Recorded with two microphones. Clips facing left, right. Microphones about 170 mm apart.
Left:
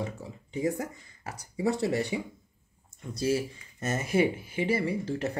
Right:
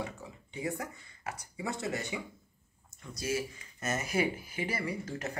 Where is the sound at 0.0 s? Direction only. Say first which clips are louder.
Left 4 dB; 35° left (ahead or behind).